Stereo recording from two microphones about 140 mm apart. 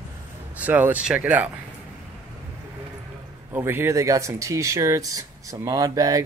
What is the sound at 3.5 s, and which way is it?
Speech, 15° right (ahead or behind).